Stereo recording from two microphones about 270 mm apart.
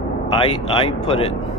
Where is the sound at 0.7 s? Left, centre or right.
Centre.